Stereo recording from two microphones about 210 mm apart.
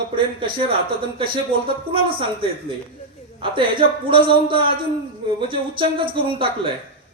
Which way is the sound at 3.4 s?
25° right (ahead or behind).